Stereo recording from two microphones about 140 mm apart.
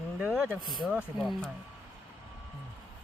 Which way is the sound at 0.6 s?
30° left (ahead or behind).